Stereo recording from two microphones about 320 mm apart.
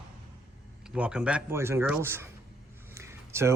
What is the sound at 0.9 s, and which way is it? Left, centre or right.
Speech, centre.